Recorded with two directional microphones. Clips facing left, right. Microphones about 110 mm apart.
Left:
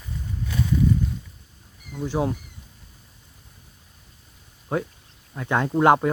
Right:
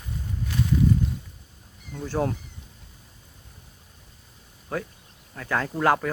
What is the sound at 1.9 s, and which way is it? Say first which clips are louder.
Speech: left 2 dB; 10° left (ahead or behind).